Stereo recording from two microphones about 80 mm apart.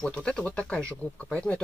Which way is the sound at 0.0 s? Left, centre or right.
Centre.